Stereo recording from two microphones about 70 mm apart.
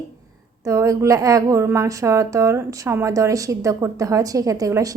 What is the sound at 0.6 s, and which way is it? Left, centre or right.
A woman's voice, right.